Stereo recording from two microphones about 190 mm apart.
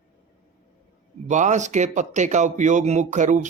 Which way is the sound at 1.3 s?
40° right (ahead or behind).